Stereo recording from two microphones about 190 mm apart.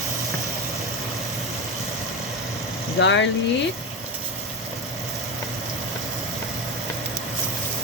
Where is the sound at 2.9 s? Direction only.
70° left (ahead or behind).